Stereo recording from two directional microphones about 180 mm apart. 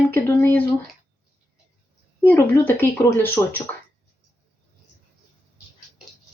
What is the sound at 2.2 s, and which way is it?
Speech, 10° left (ahead or behind).